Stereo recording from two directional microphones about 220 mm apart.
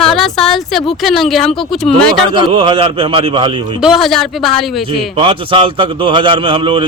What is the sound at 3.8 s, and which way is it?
A woman's voice, centre (ahead or behind).